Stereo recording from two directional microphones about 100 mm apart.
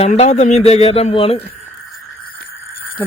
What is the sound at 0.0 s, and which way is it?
Speech, 90° left.